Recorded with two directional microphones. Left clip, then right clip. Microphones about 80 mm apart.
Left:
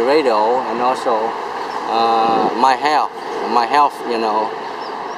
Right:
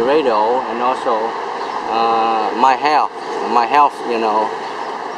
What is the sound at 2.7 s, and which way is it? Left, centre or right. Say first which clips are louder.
Speech: right 1 dB; centre.